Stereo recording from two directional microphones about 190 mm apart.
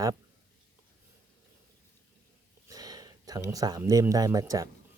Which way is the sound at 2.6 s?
20° right (ahead or behind).